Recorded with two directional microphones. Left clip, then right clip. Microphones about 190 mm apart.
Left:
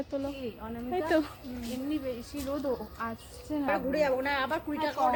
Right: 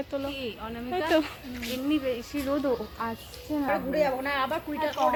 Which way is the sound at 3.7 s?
50° left (ahead or behind).